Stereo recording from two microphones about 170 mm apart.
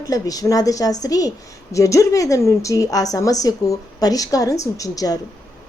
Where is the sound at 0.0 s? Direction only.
20° left (ahead or behind).